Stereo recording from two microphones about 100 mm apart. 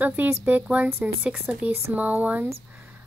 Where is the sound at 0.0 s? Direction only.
15° right (ahead or behind).